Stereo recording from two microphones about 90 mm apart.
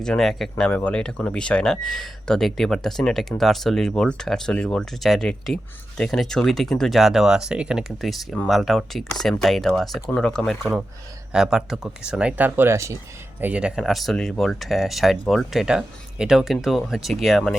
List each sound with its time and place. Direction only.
0.0 s speech: 5° left (ahead or behind)
0.6 s speech: 15° left (ahead or behind); by 13.0 s 30° right (ahead or behind)
13.4 s speech: 10° right (ahead or behind)
13.8 s speech: centre (ahead or behind)
15.6 s speech: 10° right (ahead or behind)